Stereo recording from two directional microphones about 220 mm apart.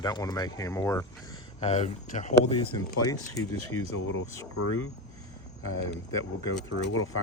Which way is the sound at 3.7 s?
65° left (ahead or behind).